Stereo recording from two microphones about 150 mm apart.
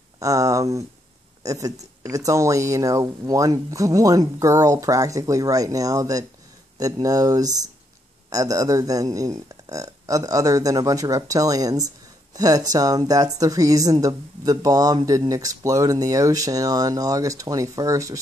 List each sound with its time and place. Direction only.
0.2 s a woman's voice: 20° right (ahead or behind)